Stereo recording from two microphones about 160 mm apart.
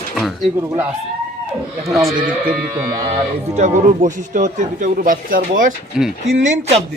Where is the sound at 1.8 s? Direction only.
Centre (ahead or behind).